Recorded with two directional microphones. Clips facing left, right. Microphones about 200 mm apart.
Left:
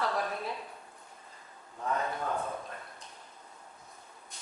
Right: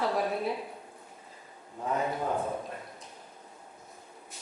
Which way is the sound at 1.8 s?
20° right (ahead or behind).